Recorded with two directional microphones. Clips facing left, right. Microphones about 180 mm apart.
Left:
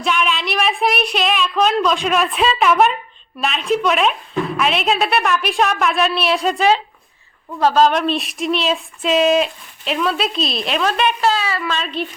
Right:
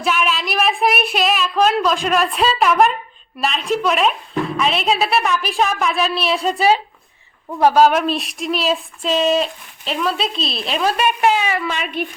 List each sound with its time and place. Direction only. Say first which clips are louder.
0.0 s speech: even; 5° right (ahead or behind)
11.0 s a woman's voice: right 1 dB; 15° right (ahead or behind)